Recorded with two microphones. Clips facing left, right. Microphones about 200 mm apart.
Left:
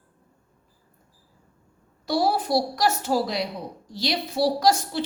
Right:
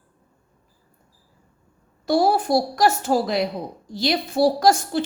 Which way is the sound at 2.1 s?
50° right (ahead or behind).